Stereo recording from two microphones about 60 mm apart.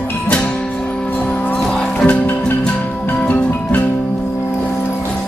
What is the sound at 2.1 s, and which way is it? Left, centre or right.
Music, left.